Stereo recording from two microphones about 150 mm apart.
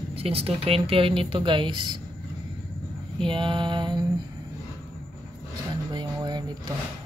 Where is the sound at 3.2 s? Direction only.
35° right (ahead or behind).